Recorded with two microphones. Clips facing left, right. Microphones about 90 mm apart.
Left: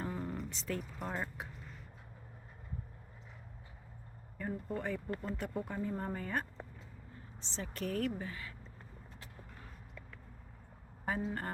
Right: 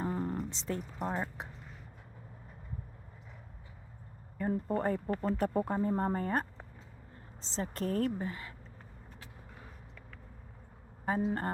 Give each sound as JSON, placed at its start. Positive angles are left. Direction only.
{"t": 0.1, "sound": "speech", "side_deg": -35}
{"t": 4.4, "sound": "speech", "side_deg": -40}
{"t": 7.5, "sound": "a woman's voice", "side_deg": -40}
{"t": 11.2, "sound": "a sound", "side_deg": -30}